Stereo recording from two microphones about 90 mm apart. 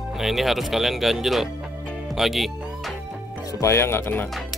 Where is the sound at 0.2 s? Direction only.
Centre (ahead or behind).